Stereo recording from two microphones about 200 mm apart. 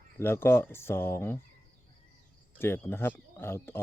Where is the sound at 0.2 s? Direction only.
10° left (ahead or behind).